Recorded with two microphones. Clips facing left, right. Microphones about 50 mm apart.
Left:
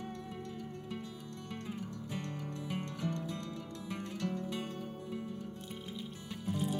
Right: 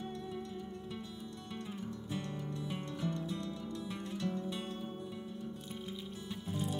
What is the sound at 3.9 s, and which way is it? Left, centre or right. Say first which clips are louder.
Music: left 1 dB; left.